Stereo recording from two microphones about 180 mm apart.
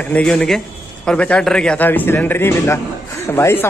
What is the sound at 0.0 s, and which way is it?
A man's voice, 5° left (ahead or behind).